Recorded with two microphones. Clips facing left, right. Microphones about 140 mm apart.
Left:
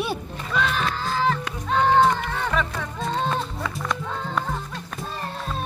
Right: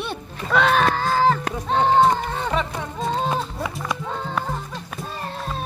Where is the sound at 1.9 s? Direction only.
20° right (ahead or behind).